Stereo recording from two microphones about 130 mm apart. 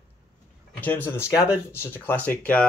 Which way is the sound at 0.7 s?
15° left (ahead or behind).